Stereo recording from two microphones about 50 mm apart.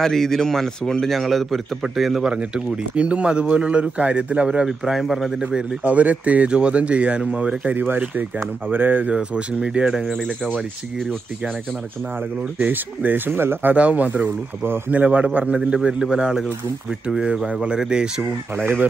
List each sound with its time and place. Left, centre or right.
0.0 s a man's voice: centre
2.2 s speech: right
4.8 s a man's voice: centre
5.9 s speech: right
7.7 s speech: right
9.1 s speech: right
9.8 s a man's voice: centre
10.1 s speech: centre
12.5 s speech: right
13.7 s speech: right
14.9 s speech: right
15.5 s a man's voice: centre
18.6 s speech: right